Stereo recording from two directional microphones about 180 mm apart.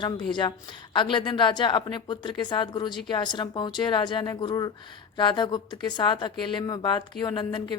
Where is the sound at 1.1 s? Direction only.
25° left (ahead or behind).